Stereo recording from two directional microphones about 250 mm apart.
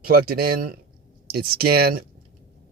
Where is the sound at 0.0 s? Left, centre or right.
Right.